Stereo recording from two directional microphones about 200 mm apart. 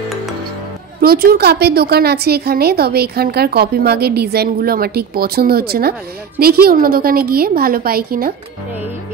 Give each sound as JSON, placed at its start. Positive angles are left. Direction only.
{"t": 1.0, "sound": "a woman's voice", "side_deg": -50}